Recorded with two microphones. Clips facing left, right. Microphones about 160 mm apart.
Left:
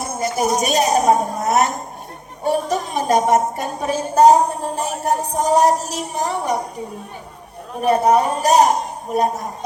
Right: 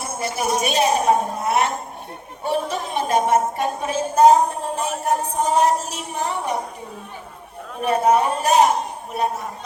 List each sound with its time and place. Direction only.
0.2 s a woman's voice: 40° left (ahead or behind)
7.8 s a woman's voice: 40° left (ahead or behind)